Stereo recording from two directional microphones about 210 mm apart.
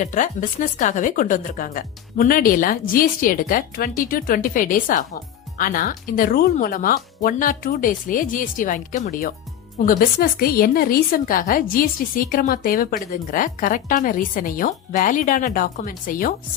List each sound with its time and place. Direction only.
0.0 s a woman's voice: 40° left (ahead or behind)